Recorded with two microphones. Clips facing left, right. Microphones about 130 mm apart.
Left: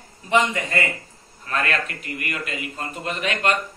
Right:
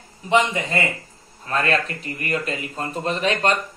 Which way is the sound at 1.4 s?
30° right (ahead or behind).